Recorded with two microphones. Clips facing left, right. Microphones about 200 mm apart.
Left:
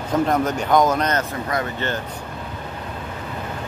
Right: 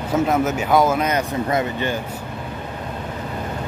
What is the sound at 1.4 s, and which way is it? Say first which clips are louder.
Speech: right 3 dB; 20° right (ahead or behind).